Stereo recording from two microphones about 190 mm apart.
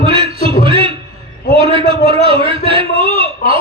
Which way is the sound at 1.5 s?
30° right (ahead or behind).